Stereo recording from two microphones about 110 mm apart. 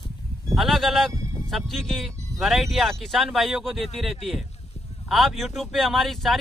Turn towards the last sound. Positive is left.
turn(degrees=0)  # may be behind; listen again after turning